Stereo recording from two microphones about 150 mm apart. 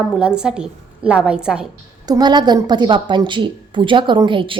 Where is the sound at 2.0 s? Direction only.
30° right (ahead or behind).